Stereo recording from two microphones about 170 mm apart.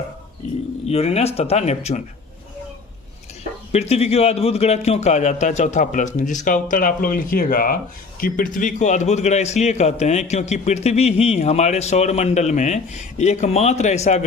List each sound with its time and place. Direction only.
0.9 s a man's voice: 35° left (ahead or behind)
3.7 s a man's voice: 40° left (ahead or behind)